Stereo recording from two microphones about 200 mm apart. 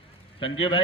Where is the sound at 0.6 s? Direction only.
25° left (ahead or behind).